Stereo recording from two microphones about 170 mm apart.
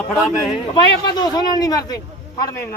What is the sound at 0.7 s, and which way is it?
A man's voice, 25° left (ahead or behind).